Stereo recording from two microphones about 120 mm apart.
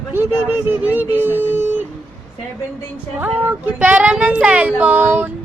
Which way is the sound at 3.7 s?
10° right (ahead or behind).